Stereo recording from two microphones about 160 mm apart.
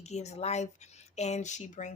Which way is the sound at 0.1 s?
45° left (ahead or behind).